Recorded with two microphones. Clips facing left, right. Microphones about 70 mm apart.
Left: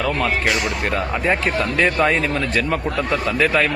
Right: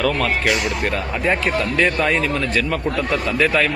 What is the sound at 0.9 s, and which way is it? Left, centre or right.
Speech, centre.